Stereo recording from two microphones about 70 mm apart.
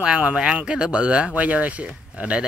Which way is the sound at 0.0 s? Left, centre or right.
Centre.